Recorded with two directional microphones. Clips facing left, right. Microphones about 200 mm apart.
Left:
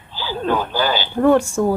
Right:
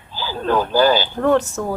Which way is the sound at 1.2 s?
10° left (ahead or behind).